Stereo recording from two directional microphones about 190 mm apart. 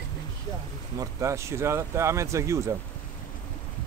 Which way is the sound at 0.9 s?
15° right (ahead or behind).